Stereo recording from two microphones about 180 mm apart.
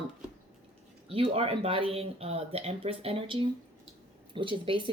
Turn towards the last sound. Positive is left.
turn(degrees=-30)  # may be behind; listen again after turning